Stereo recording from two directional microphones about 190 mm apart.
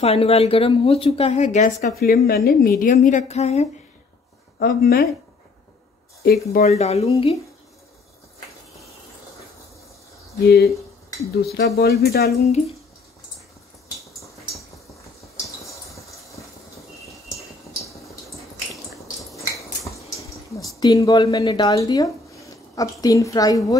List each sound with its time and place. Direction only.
0.0 s speech: 30° left (ahead or behind)
4.6 s speech: 55° left (ahead or behind)
6.5 s speech: 35° left (ahead or behind)
10.4 s speech: 55° left (ahead or behind)
10.7 s speech: centre (ahead or behind)
11.5 s speech: 55° left (ahead or behind)
12.4 s speech: 35° left (ahead or behind)
19.3 s a sound: centre (ahead or behind)
20.5 s speech: 15° left (ahead or behind)